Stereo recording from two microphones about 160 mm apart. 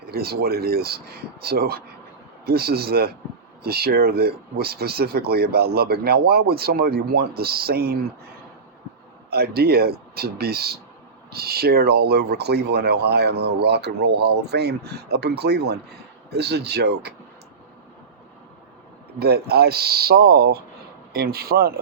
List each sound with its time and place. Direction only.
0.1 s speech: 75° right (ahead or behind)
9.3 s speech: 80° right
19.2 s speech: 80° right